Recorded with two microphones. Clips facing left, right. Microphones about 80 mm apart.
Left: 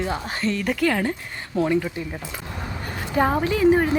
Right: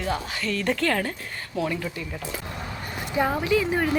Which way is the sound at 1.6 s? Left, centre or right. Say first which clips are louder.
Left 7 dB; left.